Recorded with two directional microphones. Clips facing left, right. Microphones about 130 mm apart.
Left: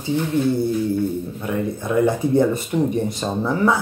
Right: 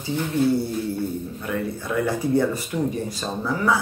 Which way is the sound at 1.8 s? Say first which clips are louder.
Left 8 dB; 20° left (ahead or behind).